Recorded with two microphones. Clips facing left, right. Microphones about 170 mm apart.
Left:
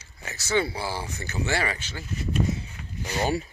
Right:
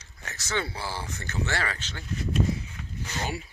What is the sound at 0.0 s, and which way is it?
Speech, 10° left (ahead or behind).